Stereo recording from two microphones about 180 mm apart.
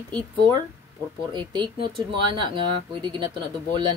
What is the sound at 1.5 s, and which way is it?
Speech, 30° right (ahead or behind).